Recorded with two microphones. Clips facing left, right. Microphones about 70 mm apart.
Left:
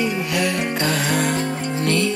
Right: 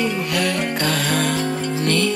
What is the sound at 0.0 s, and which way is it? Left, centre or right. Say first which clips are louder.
Music: even; centre.